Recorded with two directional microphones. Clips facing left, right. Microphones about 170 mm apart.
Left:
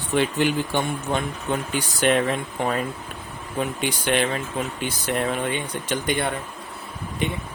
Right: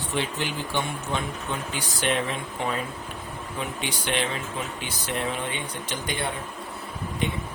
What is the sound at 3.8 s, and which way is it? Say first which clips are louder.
Speech: left 5 dB; 50° left (ahead or behind).